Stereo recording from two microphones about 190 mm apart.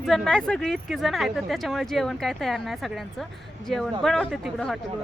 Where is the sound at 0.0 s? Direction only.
5° left (ahead or behind).